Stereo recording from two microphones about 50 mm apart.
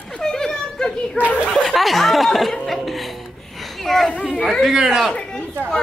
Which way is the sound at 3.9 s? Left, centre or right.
Centre.